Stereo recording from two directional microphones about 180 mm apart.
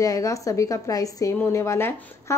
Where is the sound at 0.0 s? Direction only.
20° left (ahead or behind).